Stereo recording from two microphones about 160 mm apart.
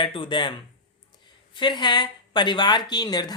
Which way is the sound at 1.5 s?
30° left (ahead or behind).